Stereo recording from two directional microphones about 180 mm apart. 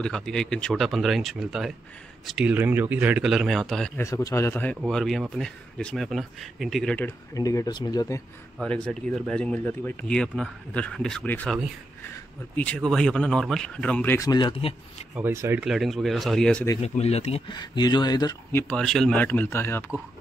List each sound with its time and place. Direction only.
0.0 s speech: 5° left (ahead or behind)
4.0 s a man's voice: 15° left (ahead or behind)
8.5 s speech: 5° left (ahead or behind)
12.5 s a man's voice: 5° left (ahead or behind); by 15.0 s 30° left (ahead or behind)
15.1 s speech: 15° right (ahead or behind)
15.6 s speech: centre (ahead or behind)
16.8 s speech: 35° left (ahead or behind); by 18.6 s 20° left (ahead or behind)
18.6 s a man's voice: 5° left (ahead or behind)